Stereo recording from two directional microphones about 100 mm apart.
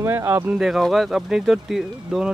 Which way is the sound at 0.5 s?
Centre (ahead or behind).